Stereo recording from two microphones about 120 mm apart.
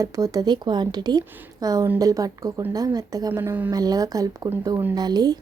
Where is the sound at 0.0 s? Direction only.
30° right (ahead or behind).